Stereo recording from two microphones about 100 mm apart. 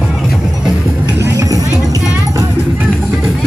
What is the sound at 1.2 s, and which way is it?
Music, 35° right (ahead or behind).